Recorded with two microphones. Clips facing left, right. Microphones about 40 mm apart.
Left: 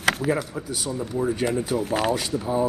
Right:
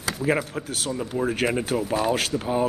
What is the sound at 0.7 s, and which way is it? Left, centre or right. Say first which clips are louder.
Speech: right 1 dB; right.